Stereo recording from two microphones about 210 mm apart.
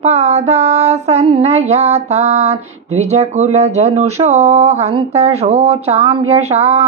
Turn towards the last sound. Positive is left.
turn(degrees=-30)  # may be behind; listen again after turning